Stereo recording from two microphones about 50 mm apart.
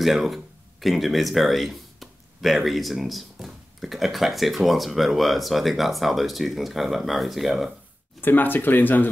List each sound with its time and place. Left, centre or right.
0.0 s speech: centre
8.2 s speech: left